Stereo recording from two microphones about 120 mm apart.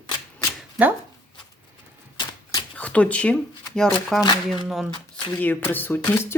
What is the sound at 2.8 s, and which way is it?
Speech, 10° left (ahead or behind).